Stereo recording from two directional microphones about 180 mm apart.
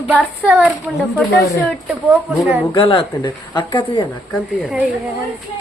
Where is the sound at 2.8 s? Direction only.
30° left (ahead or behind).